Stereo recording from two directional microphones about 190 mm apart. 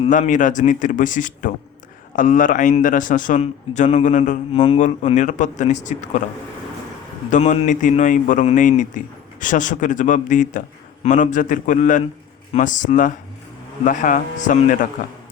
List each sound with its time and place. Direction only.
0.1 s a man's voice: 40° left (ahead or behind)
7.3 s a man's voice: 40° left (ahead or behind)